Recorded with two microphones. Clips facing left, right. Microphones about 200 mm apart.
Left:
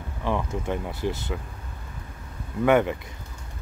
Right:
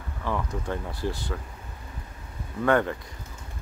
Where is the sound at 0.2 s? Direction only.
20° left (ahead or behind).